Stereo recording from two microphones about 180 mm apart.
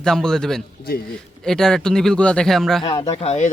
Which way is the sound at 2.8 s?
25° left (ahead or behind).